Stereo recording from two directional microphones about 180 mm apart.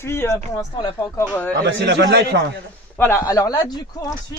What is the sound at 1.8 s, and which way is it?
Speech, 75° right (ahead or behind).